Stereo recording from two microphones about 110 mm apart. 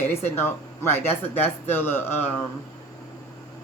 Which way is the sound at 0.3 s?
20° left (ahead or behind).